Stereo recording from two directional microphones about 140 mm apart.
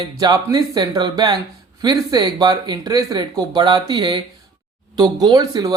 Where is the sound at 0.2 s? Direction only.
25° right (ahead or behind).